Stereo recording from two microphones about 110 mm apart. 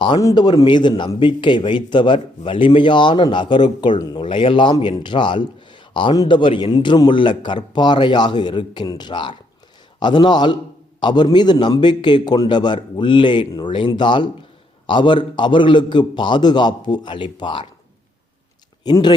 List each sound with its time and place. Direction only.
0.2 s a man's voice: 35° left (ahead or behind)
18.8 s speech: 40° left (ahead or behind)